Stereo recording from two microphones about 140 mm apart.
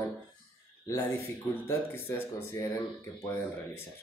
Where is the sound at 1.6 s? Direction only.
15° left (ahead or behind).